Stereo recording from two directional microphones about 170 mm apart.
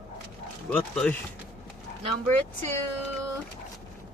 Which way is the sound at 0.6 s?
5° left (ahead or behind).